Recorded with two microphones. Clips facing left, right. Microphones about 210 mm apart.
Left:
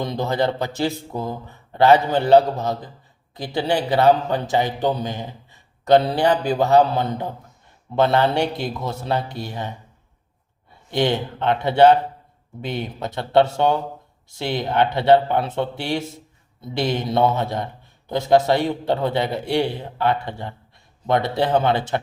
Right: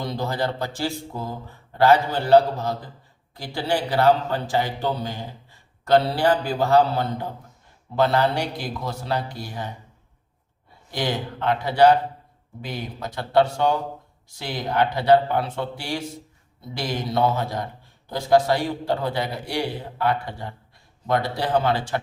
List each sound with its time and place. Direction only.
0.0 s a man's voice: 20° left (ahead or behind)
10.9 s a man's voice: 25° left (ahead or behind)